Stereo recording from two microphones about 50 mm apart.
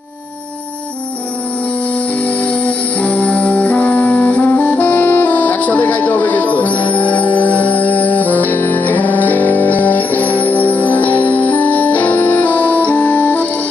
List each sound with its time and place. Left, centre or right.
2.2 s music: left